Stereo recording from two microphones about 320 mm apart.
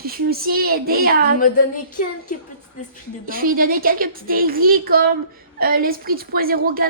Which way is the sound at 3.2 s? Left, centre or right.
Right.